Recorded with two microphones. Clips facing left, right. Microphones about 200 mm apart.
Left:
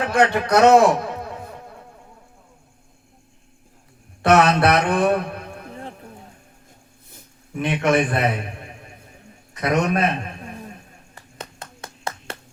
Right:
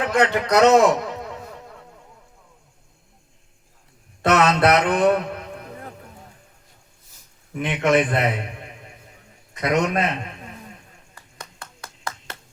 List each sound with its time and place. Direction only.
0.0 s a man's voice: 20° right (ahead or behind)
4.4 s a man's voice: 20° right (ahead or behind)
7.5 s a man's voice: 20° right (ahead or behind)
11.1 s a sound: 25° left (ahead or behind)